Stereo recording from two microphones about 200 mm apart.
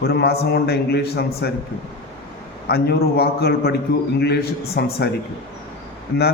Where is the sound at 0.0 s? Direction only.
55° left (ahead or behind).